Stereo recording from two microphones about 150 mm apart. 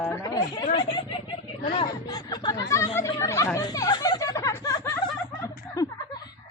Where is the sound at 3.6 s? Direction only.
25° left (ahead or behind).